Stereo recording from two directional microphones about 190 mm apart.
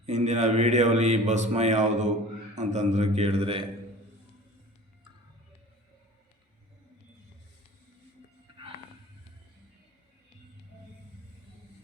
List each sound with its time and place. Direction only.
0.0 s mantra: 35° right (ahead or behind)